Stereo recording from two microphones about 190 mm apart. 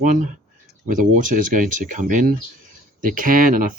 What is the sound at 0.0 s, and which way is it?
Speech, 40° right (ahead or behind).